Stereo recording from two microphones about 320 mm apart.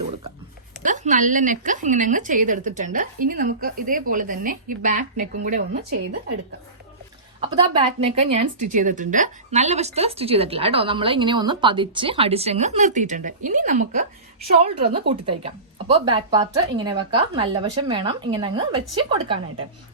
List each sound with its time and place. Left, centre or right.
0.8 s a woman's voice: right
7.7 s a woman's voice: centre